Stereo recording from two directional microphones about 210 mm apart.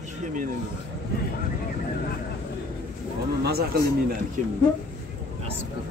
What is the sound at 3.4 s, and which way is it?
Speech, 45° right (ahead or behind).